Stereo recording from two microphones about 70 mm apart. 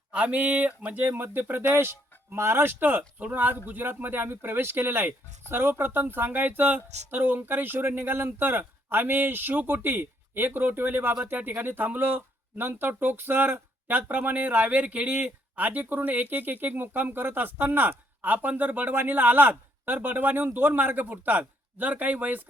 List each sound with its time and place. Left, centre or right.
0.1 s speech: centre
1.7 s speech: right